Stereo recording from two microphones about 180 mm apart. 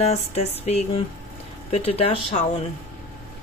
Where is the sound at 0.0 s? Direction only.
35° left (ahead or behind).